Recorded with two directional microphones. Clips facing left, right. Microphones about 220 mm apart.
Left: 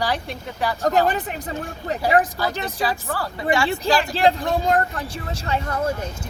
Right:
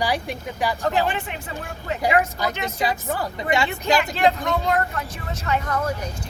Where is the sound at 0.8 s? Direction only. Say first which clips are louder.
Left 5 dB; 40° left (ahead or behind).